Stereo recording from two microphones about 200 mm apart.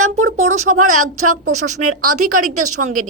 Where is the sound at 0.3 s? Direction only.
35° right (ahead or behind).